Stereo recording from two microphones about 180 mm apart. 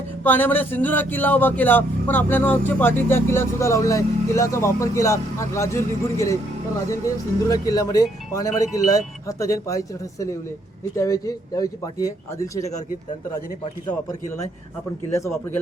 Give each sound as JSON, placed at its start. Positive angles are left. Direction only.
{"t": 0.2, "sound": "a man's voice", "side_deg": 10}